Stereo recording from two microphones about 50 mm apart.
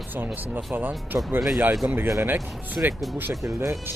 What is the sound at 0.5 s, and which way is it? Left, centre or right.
Speech, right.